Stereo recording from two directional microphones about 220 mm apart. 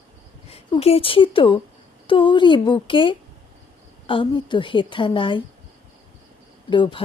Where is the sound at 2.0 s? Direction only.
25° left (ahead or behind).